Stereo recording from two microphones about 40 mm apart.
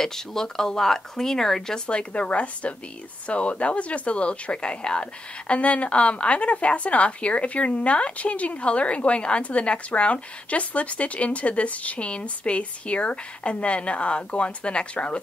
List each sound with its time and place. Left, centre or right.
0.0 s speech: centre
1.9 s speech: left